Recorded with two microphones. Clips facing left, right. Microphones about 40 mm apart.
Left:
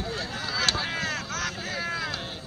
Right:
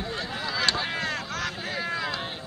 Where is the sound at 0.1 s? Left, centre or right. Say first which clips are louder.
Right 1 dB; centre.